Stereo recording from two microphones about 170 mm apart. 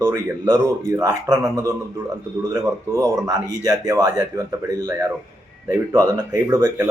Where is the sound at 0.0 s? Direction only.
20° right (ahead or behind).